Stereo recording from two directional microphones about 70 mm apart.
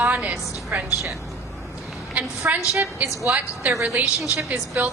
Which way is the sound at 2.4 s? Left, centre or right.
Right.